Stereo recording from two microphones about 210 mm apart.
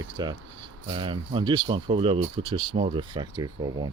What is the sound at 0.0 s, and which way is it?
Speech, 20° right (ahead or behind).